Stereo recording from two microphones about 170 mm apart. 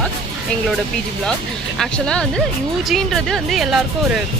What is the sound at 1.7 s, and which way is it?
Speech, 5° left (ahead or behind).